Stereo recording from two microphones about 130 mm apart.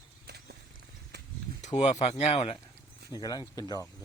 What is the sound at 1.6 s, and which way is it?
Speech, 60° left (ahead or behind).